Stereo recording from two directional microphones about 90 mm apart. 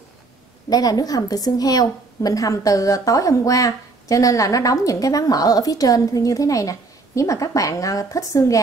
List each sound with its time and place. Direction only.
0.7 s a woman's voice: 45° left (ahead or behind)